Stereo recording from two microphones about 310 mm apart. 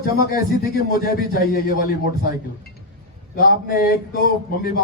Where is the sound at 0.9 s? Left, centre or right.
Left.